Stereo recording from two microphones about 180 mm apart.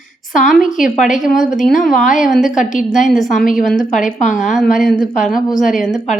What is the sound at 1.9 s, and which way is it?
Speech, 45° left (ahead or behind).